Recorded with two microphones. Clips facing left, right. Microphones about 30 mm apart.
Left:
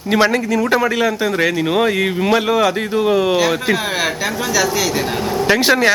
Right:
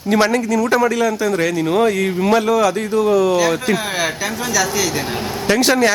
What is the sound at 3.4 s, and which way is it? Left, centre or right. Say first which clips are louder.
Speech: left 1 dB; centre.